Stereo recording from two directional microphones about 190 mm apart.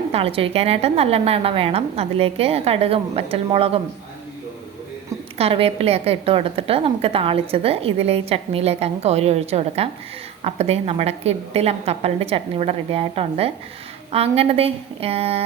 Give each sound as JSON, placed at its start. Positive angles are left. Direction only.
{"t": 0.1, "sound": "a woman's voice", "side_deg": -30}
{"t": 5.4, "sound": "a woman's voice", "side_deg": -30}